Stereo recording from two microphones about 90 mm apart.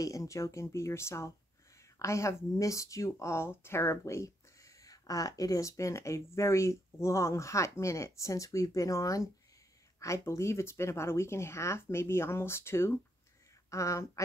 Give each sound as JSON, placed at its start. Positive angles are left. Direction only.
{"t": 0.0, "sound": "speech", "side_deg": 40}